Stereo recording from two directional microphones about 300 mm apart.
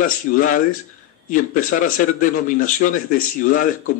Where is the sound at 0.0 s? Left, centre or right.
Left.